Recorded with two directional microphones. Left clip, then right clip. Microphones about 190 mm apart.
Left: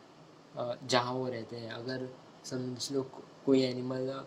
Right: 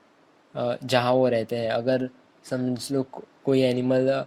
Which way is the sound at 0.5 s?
15° right (ahead or behind).